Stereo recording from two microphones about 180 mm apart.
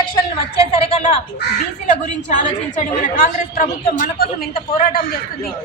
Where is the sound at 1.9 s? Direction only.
45° left (ahead or behind).